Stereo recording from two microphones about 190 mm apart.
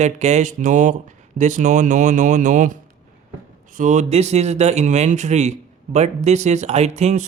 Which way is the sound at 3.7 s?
40° right (ahead or behind).